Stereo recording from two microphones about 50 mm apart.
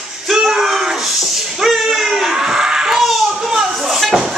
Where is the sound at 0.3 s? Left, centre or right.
Centre.